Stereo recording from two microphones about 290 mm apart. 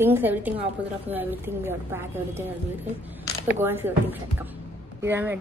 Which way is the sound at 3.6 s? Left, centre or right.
Centre.